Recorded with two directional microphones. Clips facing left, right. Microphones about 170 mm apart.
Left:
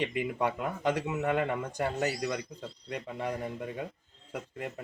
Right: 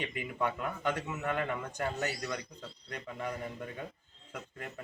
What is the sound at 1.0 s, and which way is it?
Speech, 25° left (ahead or behind).